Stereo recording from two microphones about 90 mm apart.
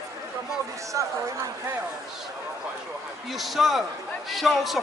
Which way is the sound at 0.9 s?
40° right (ahead or behind).